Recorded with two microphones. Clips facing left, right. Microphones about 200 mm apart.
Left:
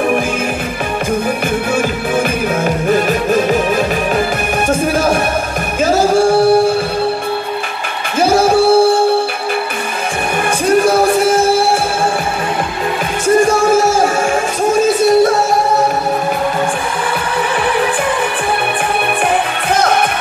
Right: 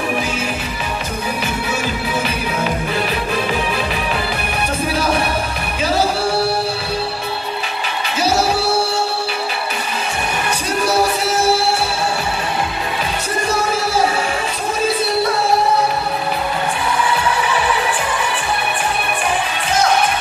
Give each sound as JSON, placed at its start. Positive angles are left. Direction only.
{"t": 2.1, "sound": "music", "side_deg": 45}
{"t": 8.2, "sound": "music", "side_deg": 50}
{"t": 10.7, "sound": "music", "side_deg": 50}
{"t": 13.4, "sound": "music", "side_deg": 50}
{"t": 19.7, "sound": "music", "side_deg": 55}